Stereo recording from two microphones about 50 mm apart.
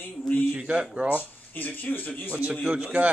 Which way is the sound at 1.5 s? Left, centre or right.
Left.